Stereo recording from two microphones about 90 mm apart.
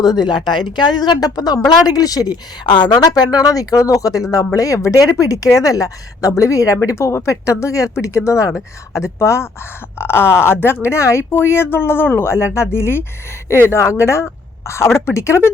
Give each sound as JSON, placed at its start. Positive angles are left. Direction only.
{"t": 0.0, "sound": "a woman's voice", "side_deg": 50}